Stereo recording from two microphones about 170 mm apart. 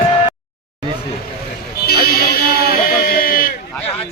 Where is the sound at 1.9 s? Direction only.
65° left (ahead or behind).